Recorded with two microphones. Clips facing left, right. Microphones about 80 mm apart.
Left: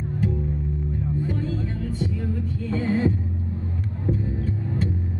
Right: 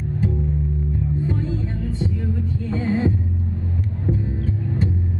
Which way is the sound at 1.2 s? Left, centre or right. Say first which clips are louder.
Right 2 dB; right.